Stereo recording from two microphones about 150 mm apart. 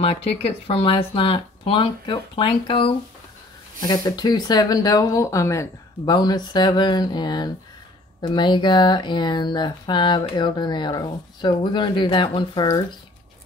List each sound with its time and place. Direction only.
0.0 s speech: 40° left (ahead or behind)